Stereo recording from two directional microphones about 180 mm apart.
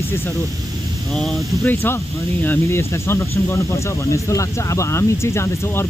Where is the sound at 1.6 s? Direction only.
10° left (ahead or behind).